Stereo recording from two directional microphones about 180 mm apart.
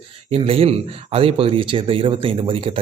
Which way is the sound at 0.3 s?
30° right (ahead or behind).